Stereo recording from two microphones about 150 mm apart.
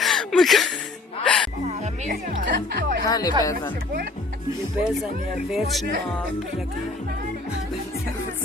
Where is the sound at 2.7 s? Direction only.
90° right.